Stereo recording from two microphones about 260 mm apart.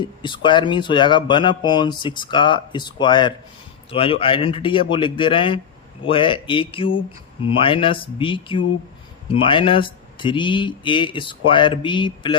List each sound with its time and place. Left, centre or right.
0.0 s speech: centre